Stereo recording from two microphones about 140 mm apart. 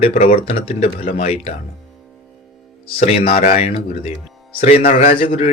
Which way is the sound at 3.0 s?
45° left (ahead or behind).